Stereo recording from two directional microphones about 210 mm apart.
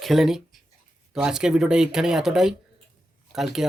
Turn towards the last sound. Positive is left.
turn(degrees=0)  # may be behind; listen again after turning